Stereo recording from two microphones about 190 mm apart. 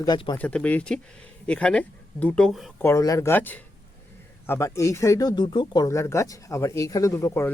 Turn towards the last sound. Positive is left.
turn(degrees=15)  # may be behind; listen again after turning